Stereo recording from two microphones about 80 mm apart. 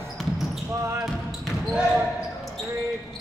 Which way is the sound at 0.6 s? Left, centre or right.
Right.